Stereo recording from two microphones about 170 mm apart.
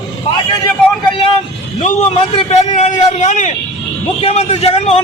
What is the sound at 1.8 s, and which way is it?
A man's voice, 40° left (ahead or behind).